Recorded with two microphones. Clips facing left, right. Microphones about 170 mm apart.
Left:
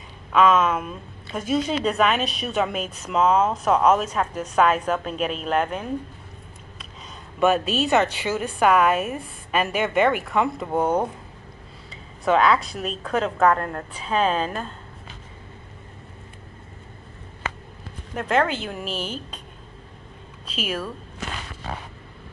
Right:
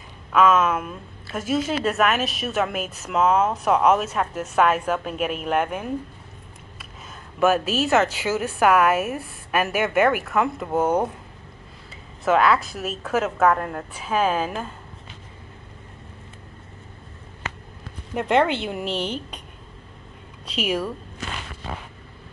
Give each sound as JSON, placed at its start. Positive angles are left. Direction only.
{"t": 0.3, "sound": "a woman's voice", "side_deg": -5}
{"t": 7.3, "sound": "a woman's voice", "side_deg": -5}
{"t": 18.1, "sound": "a woman's voice", "side_deg": -15}
{"t": 18.9, "sound": "speech", "side_deg": -70}
{"t": 20.6, "sound": "a woman's voice", "side_deg": -15}